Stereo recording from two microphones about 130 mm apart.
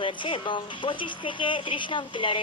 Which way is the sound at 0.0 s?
40° left (ahead or behind).